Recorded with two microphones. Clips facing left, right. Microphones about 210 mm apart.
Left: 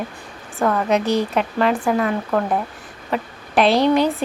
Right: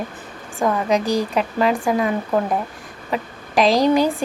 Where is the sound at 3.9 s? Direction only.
10° right (ahead or behind).